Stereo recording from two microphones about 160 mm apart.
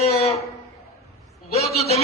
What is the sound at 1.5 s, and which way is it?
Speech, 40° left (ahead or behind).